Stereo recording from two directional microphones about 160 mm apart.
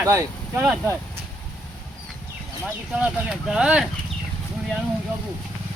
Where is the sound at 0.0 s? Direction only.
20° right (ahead or behind).